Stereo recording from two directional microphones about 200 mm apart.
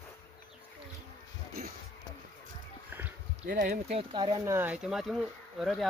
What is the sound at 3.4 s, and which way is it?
Speech, 45° right (ahead or behind).